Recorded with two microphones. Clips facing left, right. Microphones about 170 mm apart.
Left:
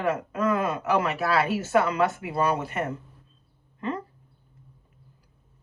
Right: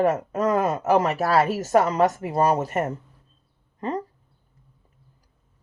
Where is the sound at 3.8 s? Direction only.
40° right (ahead or behind).